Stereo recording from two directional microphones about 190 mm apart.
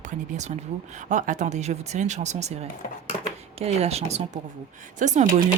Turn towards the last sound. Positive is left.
turn(degrees=-40)  # may be behind; listen again after turning